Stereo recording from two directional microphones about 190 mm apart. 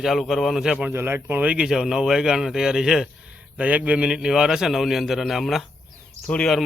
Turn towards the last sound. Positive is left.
turn(degrees=5)  # may be behind; listen again after turning